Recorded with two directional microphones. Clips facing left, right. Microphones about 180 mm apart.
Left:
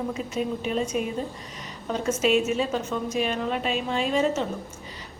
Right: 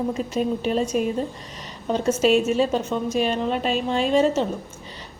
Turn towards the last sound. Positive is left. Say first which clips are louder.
# right 5 dB
turn(degrees=-30)  # may be behind; listen again after turning